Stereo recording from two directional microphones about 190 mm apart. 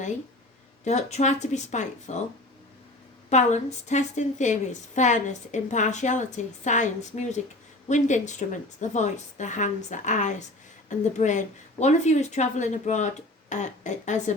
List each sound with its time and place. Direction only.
0.9 s a woman's voice: 35° left (ahead or behind)
3.2 s a woman's voice: 40° left (ahead or behind)